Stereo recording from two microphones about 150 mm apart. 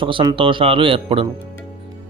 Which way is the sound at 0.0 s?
35° right (ahead or behind).